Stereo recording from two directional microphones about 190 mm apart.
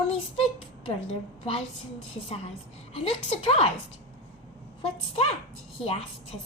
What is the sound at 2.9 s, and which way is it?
Speech, 30° left (ahead or behind).